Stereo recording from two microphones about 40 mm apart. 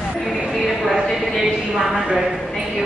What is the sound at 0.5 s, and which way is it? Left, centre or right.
Speech, centre.